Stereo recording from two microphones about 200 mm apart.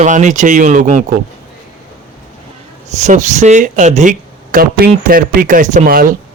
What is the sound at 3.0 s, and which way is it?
A man's voice, 35° right (ahead or behind).